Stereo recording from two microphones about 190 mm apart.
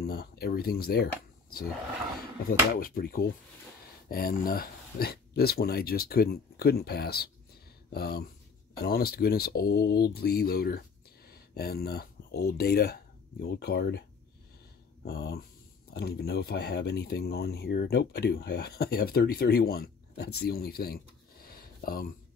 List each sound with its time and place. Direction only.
0.0 s speech: 55° left (ahead or behind)
2.4 s speech: 50° left (ahead or behind)
15.0 s speech: 55° left (ahead or behind)